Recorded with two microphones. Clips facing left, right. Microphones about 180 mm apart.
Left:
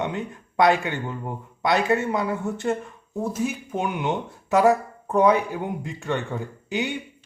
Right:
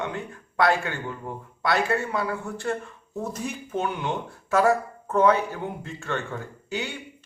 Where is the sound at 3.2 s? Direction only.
10° left (ahead or behind).